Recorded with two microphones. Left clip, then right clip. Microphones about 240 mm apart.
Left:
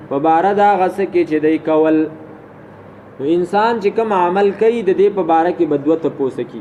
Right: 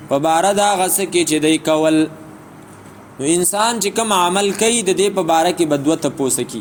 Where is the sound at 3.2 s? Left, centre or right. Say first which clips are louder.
Left 2 dB; right.